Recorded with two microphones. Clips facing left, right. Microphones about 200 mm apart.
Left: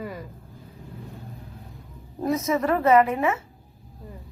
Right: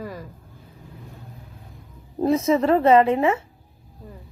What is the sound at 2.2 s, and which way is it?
A woman's voice, 30° right (ahead or behind).